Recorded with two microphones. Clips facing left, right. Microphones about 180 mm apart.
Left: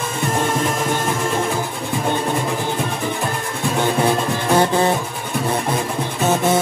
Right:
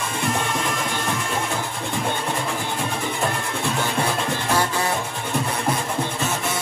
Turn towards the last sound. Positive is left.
turn(degrees=30)  # may be behind; listen again after turning